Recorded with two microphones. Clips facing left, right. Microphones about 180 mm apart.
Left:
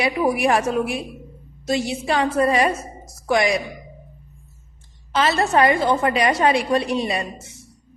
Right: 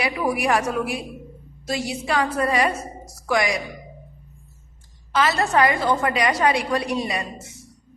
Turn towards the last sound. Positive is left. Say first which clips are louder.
# left 2 dB
turn(degrees=30)  # may be behind; listen again after turning